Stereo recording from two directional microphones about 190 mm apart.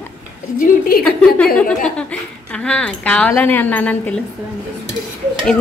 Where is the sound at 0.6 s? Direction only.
50° left (ahead or behind).